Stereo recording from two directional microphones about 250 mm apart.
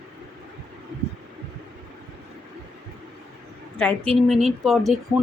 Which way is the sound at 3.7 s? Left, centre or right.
Centre.